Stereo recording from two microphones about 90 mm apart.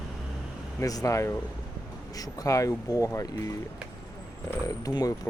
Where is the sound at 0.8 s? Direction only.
40° left (ahead or behind).